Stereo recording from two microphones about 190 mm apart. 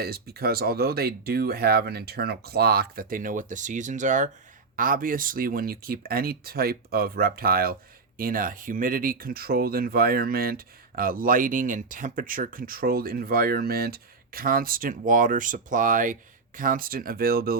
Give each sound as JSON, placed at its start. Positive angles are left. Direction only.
{"t": 0.0, "sound": "speech", "side_deg": -55}